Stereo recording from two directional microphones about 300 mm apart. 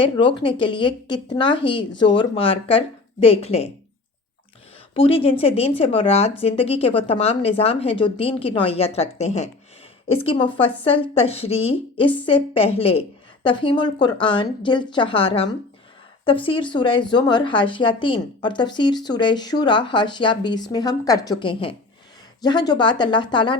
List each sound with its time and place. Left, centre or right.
0.0 s speech: centre
4.9 s speech: centre